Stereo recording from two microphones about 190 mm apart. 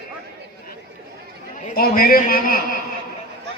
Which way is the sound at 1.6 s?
50° left (ahead or behind).